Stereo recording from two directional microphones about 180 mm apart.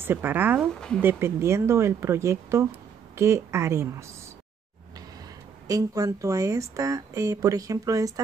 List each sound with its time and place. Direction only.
0.0 s speech: 10° right (ahead or behind)
0.7 s speech: 5° left (ahead or behind)
1.0 s speech: 15° right (ahead or behind)
5.7 s speech: 20° right (ahead or behind)